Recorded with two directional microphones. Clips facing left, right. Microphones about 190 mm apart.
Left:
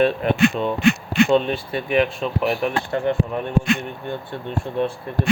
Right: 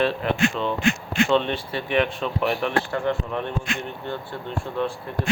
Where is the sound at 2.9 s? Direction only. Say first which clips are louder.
Left 3 dB; 15° left (ahead or behind).